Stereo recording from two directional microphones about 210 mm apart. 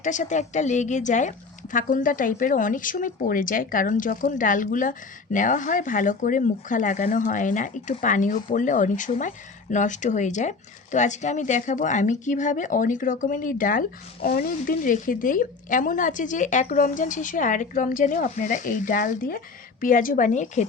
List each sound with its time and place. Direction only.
0.0 s a woman's voice: 35° left (ahead or behind)